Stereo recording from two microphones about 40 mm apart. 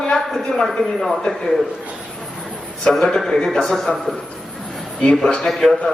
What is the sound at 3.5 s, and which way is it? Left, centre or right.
Speech, centre.